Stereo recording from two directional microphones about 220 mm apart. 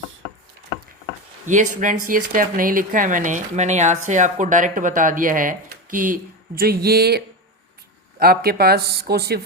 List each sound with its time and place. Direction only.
1.7 s speech: 35° right (ahead or behind)
8.2 s speech: 45° right (ahead or behind)